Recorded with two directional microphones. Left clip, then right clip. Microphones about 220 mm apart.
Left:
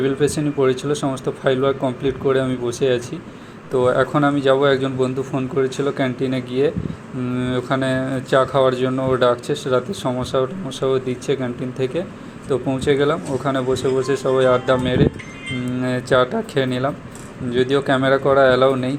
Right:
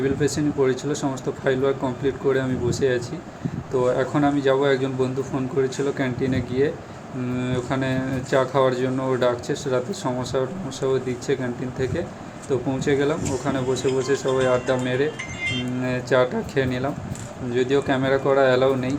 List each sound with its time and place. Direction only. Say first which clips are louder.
0.2 s speech: left 3 dB; 15° left (ahead or behind)
12.5 s speech: left 4 dB; 10° left (ahead or behind)